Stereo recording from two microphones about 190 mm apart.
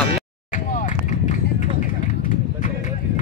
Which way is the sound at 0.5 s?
40° left (ahead or behind).